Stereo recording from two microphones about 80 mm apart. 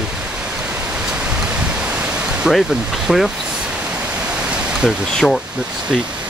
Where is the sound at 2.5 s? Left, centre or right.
Centre.